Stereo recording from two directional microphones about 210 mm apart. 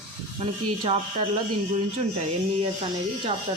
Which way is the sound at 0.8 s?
25° right (ahead or behind).